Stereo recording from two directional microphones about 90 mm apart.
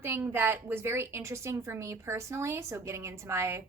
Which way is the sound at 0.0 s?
25° right (ahead or behind).